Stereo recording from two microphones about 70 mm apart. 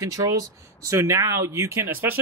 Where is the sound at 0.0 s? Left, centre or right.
Right.